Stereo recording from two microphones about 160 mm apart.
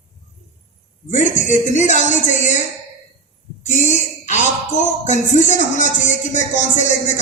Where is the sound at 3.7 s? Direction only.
50° left (ahead or behind).